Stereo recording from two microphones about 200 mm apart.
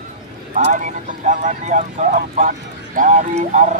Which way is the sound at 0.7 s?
40° right (ahead or behind).